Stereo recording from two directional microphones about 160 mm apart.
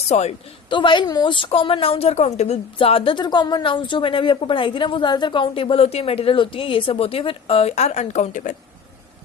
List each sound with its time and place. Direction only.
0.1 s a woman's voice: 45° left (ahead or behind)
0.7 s speech: 30° left (ahead or behind); by 8.5 s 50° left (ahead or behind)